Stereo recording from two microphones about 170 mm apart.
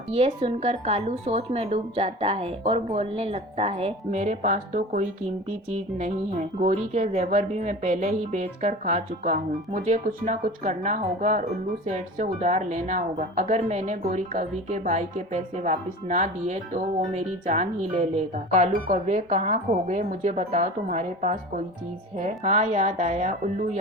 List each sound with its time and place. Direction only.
0.1 s a woman's voice: 35° right (ahead or behind)